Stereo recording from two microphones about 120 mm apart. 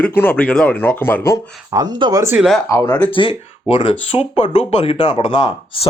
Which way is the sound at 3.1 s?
45° left (ahead or behind).